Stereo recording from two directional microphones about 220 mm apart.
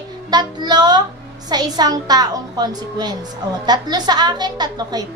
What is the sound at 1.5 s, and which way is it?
A woman's voice, 20° right (ahead or behind).